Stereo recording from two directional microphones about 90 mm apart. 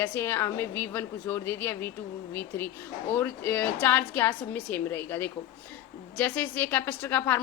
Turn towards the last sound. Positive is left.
turn(degrees=20)  # may be behind; listen again after turning